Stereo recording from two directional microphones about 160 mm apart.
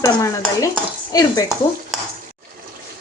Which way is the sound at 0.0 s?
20° left (ahead or behind).